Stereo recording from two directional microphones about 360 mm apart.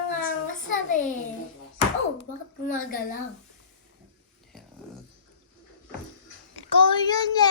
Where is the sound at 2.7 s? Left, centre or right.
Left.